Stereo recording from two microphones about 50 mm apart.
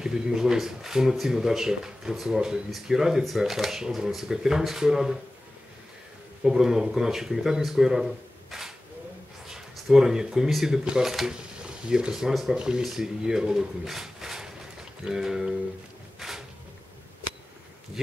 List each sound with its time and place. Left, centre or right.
0.0 s speech: centre
6.4 s speech: centre
9.8 s speech: centre
11.3 s speech: centre
12.5 s speech: centre
12.8 s speech: centre
16.2 s a sound: centre